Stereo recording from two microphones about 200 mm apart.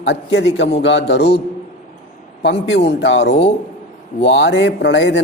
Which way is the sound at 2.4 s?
60° left (ahead or behind).